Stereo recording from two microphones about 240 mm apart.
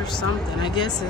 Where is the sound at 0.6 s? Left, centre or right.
Centre.